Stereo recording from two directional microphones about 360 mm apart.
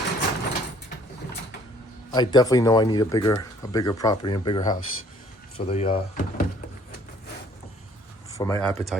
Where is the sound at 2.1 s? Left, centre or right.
Centre.